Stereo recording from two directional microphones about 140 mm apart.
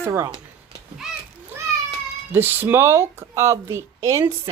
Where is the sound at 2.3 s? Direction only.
15° right (ahead or behind).